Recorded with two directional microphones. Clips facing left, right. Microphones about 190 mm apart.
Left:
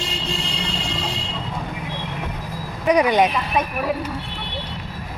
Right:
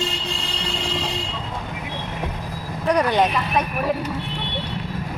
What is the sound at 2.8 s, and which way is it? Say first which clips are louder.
Speech: left 2 dB; 10° left (ahead or behind).